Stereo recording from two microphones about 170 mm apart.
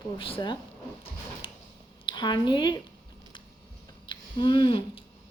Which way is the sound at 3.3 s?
25° left (ahead or behind).